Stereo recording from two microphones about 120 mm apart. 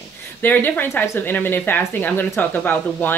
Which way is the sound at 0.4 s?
15° left (ahead or behind).